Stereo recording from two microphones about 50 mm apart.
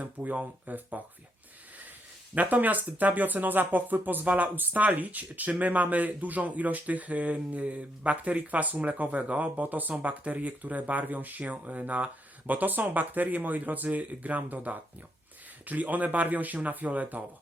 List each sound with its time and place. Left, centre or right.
0.0 s speech: right
2.3 s speech: right